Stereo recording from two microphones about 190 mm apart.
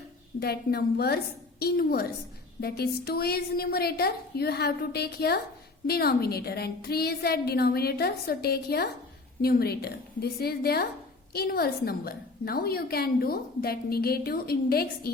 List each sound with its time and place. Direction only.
0.3 s a woman's voice: 55° left (ahead or behind)